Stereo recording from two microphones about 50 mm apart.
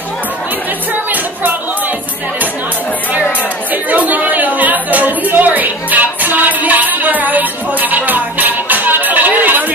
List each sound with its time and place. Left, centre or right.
3.7 s chatter: right